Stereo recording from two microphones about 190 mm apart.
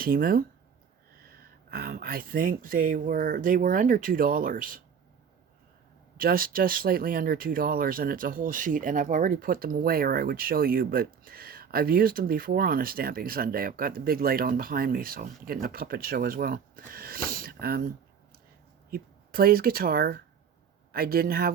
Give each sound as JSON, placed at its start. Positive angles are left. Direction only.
{"t": 0.0, "sound": "speech", "side_deg": -50}
{"t": 1.7, "sound": "speech", "side_deg": -50}
{"t": 6.1, "sound": "speech", "side_deg": -50}
{"t": 18.9, "sound": "speech", "side_deg": -50}